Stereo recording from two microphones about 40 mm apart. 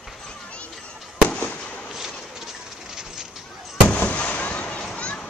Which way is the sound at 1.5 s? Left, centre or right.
Left.